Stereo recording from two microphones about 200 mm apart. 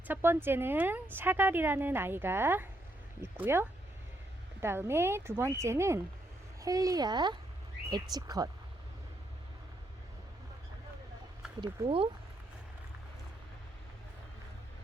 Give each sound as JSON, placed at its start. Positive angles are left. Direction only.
{"t": 0.1, "sound": "speech", "side_deg": -10}
{"t": 11.6, "sound": "speech", "side_deg": -25}